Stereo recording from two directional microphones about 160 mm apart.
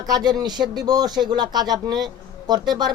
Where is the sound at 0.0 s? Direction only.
25° right (ahead or behind).